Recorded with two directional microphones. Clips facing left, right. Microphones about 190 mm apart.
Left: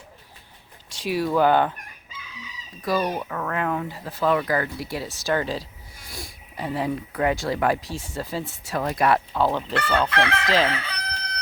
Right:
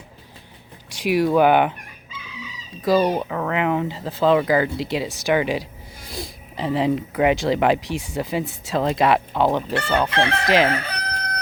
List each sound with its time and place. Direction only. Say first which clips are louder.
0.9 s speech: right 5 dB; 15° right (ahead or behind)
2.8 s speech: right 6 dB; 25° right (ahead or behind)
3.2 s speech: right 4 dB; 15° right (ahead or behind)
10.2 s chicken: right 2 dB; 30° right (ahead or behind)
10.7 s crowing: right 5 dB; 45° right (ahead or behind)